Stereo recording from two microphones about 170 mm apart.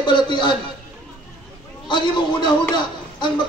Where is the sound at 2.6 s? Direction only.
25° left (ahead or behind).